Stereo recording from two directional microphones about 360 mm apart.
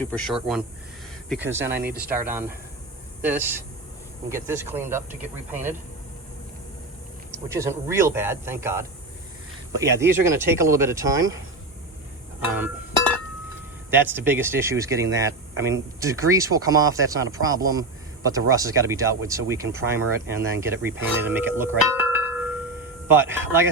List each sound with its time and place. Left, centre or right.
0.0 s a man's voice: centre
1.8 s speech: right
2.0 s a man's voice: centre
7.4 s speech: centre
13.9 s speech: centre
22.0 s bell: centre
23.0 s speech: centre